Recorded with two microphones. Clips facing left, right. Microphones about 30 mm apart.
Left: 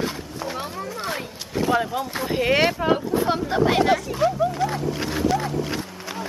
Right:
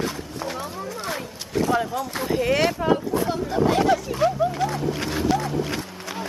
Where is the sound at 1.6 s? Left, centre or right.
Centre.